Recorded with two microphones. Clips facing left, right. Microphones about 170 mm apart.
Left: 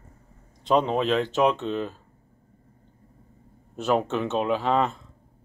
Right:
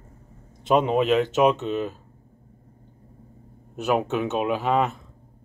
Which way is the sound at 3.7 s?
10° right (ahead or behind).